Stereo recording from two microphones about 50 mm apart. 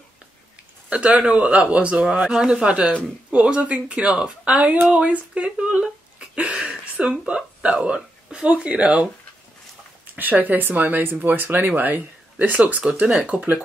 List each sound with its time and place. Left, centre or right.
0.8 s speech: right
10.4 s speech: right